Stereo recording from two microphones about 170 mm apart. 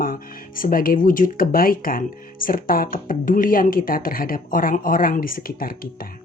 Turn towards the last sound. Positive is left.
turn(degrees=60)  # may be behind; listen again after turning